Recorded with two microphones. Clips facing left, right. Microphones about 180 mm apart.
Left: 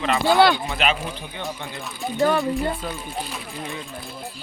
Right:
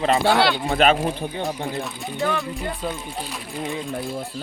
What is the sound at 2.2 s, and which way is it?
Speech, 35° left (ahead or behind).